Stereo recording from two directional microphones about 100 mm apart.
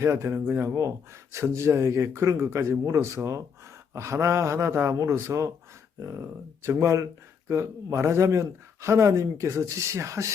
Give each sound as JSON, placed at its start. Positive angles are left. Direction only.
{"t": 0.0, "sound": "speech", "side_deg": -25}